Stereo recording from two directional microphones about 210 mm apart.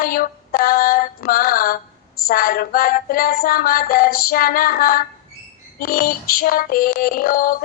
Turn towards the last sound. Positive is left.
turn(degrees=45)  # may be behind; listen again after turning